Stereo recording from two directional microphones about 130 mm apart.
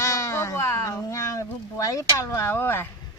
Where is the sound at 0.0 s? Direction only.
20° left (ahead or behind).